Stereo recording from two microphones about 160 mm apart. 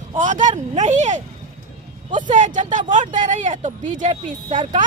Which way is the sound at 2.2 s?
50° right (ahead or behind).